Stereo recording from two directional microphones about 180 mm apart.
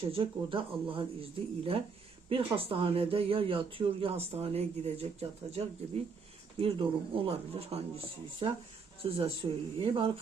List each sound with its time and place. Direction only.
0.0 s speech: 30° right (ahead or behind)